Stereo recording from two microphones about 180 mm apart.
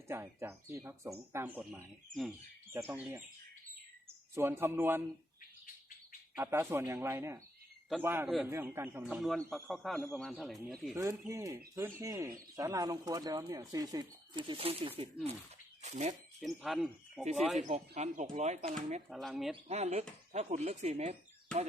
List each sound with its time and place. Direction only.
0.1 s speech: 15° right (ahead or behind)
4.4 s speech: 15° right (ahead or behind)
6.3 s speech: 15° right (ahead or behind)
10.9 s speech: 20° right (ahead or behind); by 16.1 s 40° right (ahead or behind)
16.4 s speech: centre (ahead or behind)
17.6 s speech: 35° right (ahead or behind)
19.0 s speech: centre (ahead or behind)
19.6 s speech: 35° right (ahead or behind)